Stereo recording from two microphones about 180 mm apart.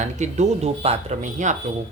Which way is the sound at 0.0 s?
40° right (ahead or behind).